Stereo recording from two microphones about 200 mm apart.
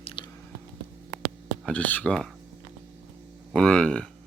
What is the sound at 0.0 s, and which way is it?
Chewing, 25° left (ahead or behind).